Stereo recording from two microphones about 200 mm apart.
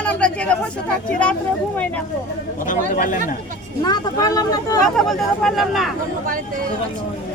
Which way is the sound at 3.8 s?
20° left (ahead or behind).